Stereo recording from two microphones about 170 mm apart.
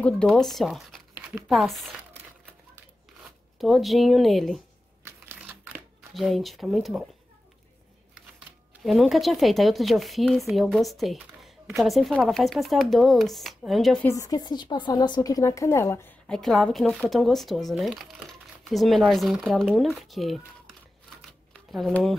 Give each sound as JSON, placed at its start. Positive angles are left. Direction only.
{"t": 0.0, "sound": "speech", "side_deg": 5}
{"t": 3.5, "sound": "speech", "side_deg": 0}
{"t": 5.0, "sound": "a sound", "side_deg": -10}
{"t": 6.1, "sound": "speech", "side_deg": 0}
{"t": 8.8, "sound": "speech", "side_deg": 0}
{"t": 14.0, "sound": "a woman's voice", "side_deg": 20}
{"t": 16.3, "sound": "speech", "side_deg": 0}
{"t": 21.5, "sound": "speech", "side_deg": 0}